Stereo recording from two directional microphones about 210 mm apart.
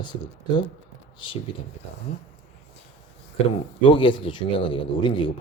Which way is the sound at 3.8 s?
25° left (ahead or behind).